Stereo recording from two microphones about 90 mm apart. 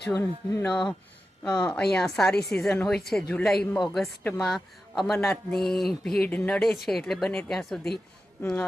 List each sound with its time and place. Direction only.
0.1 s speech: 25° left (ahead or behind)
0.7 s a woman's voice: 5° left (ahead or behind)
6.2 s a woman's voice: 15° left (ahead or behind)
6.6 s a woman's voice: 5° left (ahead or behind)